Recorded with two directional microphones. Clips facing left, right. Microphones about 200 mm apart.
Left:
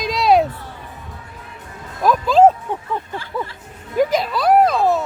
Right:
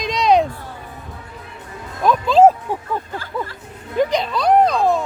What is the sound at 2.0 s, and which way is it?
Speech, centre (ahead or behind).